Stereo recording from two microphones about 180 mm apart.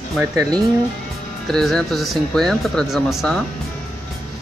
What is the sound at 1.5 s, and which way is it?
Speech, centre (ahead or behind).